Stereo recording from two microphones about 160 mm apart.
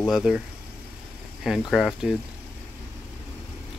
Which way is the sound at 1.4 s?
5° right (ahead or behind).